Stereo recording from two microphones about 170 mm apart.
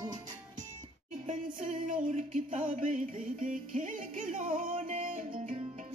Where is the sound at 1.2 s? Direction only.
50° right (ahead or behind).